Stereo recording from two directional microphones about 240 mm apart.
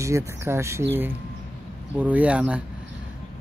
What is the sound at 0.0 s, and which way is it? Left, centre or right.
Speech, centre.